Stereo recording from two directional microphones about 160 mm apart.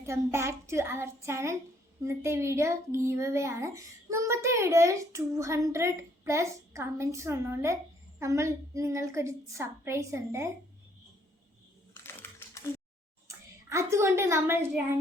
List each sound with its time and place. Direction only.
0.0 s a woman's voice: 15° right (ahead or behind)
12.2 s a sound: 15° left (ahead or behind)
13.2 s speech: 15° right (ahead or behind)